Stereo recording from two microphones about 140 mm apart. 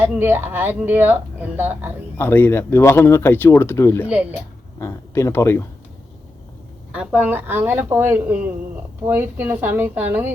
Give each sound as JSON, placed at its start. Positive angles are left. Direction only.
{"t": 0.0, "sound": "speech", "side_deg": -15}
{"t": 2.1, "sound": "speech", "side_deg": 15}
{"t": 4.1, "sound": "speech", "side_deg": -10}
{"t": 4.8, "sound": "speech", "side_deg": 20}
{"t": 6.9, "sound": "speech", "side_deg": -5}